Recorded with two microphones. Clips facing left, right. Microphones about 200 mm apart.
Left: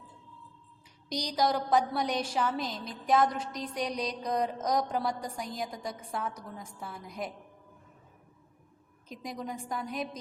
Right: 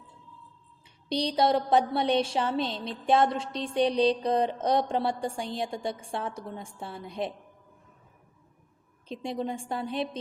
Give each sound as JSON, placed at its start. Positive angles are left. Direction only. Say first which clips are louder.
{"t": 1.1, "sound": "a woman's voice", "louder": "right 5 dB", "side_deg": -30}
{"t": 9.0, "sound": "a woman's voice", "louder": "right 6 dB", "side_deg": -30}